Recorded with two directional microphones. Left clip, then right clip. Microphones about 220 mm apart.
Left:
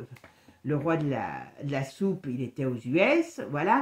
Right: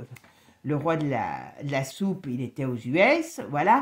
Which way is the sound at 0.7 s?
40° right (ahead or behind).